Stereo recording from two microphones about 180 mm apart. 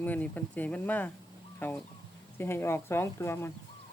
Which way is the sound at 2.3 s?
15° left (ahead or behind).